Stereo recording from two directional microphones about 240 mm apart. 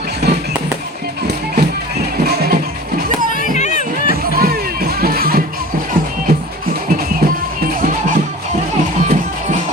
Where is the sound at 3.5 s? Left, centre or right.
Left.